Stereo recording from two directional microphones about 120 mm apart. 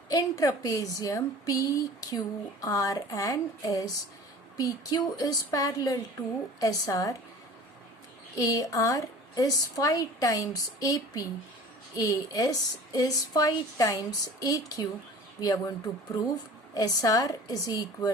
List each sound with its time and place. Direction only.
0.1 s a woman's voice: 30° left (ahead or behind)
8.4 s a woman's voice: 30° left (ahead or behind)
16.7 s a woman's voice: 30° left (ahead or behind)